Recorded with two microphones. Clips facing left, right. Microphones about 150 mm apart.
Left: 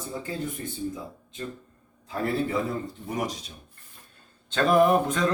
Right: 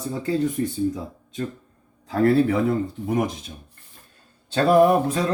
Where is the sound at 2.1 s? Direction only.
65° right (ahead or behind).